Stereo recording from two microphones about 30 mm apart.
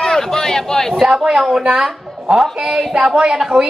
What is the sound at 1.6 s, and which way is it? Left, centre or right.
Speech, right.